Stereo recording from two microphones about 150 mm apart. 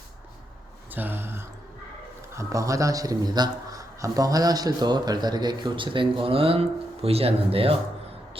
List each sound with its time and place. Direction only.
0.9 s a man's voice: 15° right (ahead or behind); by 7.8 s 40° right (ahead or behind)